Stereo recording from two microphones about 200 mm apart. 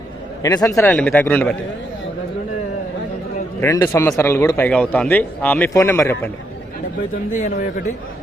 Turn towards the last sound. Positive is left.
turn(degrees=40)  # may be behind; listen again after turning